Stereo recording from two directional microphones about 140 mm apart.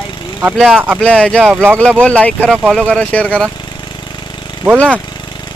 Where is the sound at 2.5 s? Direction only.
10° right (ahead or behind).